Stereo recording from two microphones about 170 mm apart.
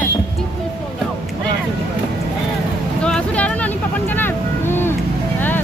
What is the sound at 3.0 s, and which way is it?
Vehicle, 5° left (ahead or behind).